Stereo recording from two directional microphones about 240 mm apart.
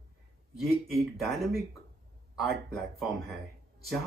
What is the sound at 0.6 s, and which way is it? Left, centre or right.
Speech, centre.